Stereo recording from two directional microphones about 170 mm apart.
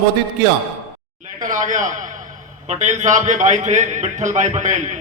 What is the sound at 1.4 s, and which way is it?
A man's voice, 50° right (ahead or behind).